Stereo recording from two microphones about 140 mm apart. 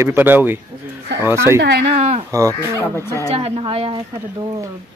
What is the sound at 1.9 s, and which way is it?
Speech, 50° right (ahead or behind).